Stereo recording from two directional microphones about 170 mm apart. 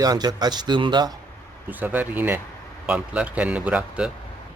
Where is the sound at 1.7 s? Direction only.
10° right (ahead or behind).